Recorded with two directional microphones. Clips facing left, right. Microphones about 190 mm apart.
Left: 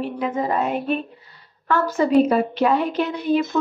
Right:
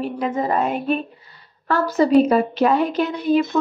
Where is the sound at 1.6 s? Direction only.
35° right (ahead or behind).